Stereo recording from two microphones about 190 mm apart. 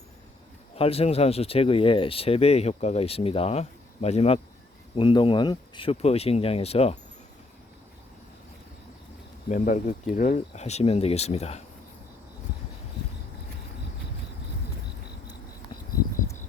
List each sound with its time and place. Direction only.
0.8 s speech: 30° left (ahead or behind)
9.5 s speech: 40° left (ahead or behind)